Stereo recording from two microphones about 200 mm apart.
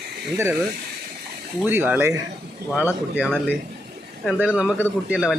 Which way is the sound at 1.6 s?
10° right (ahead or behind).